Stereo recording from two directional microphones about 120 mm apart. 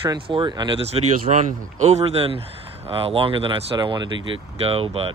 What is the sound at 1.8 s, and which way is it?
Speech, 65° right (ahead or behind).